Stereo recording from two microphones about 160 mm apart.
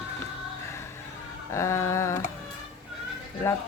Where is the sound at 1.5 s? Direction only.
20° left (ahead or behind).